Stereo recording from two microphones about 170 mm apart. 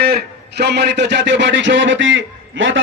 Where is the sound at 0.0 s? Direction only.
70° right (ahead or behind); by 2.2 s 90° right.